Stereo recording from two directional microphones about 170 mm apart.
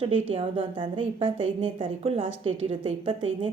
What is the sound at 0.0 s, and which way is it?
A woman's voice, 35° right (ahead or behind).